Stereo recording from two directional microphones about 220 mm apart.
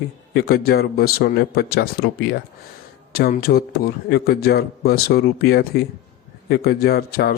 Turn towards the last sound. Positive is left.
turn(degrees=45)  # may be behind; listen again after turning